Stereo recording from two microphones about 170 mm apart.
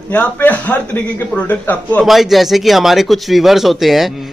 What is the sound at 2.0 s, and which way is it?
A man's voice, centre (ahead or behind).